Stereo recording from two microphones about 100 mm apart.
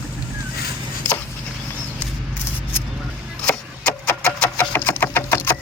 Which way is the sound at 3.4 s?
20° left (ahead or behind).